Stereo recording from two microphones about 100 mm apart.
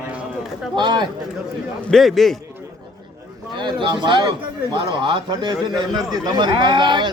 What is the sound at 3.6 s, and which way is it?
Speech, 50° right (ahead or behind).